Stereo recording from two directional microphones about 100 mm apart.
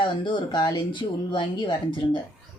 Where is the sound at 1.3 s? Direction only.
55° left (ahead or behind).